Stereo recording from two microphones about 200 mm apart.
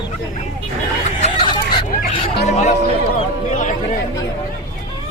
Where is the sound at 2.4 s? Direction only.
35° left (ahead or behind).